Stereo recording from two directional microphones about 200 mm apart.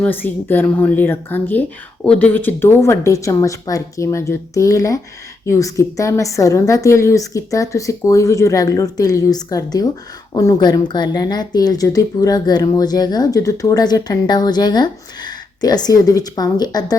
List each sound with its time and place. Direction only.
0.0 s a woman's voice: 10° left (ahead or behind)